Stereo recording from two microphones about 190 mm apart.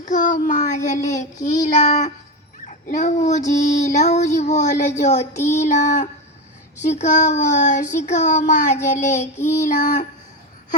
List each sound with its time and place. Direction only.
0.0 s child singing: 45° left (ahead or behind)
2.6 s speech: 40° left (ahead or behind)
3.6 s child singing: 40° left (ahead or behind)